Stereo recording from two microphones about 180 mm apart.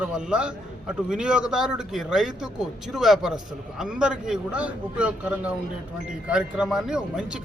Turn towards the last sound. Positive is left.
turn(degrees=-5)  # may be behind; listen again after turning